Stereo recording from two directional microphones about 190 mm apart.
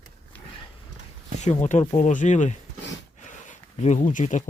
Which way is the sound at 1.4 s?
35° left (ahead or behind).